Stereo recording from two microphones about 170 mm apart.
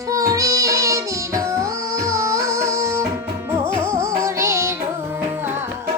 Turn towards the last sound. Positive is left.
turn(degrees=-15)  # may be behind; listen again after turning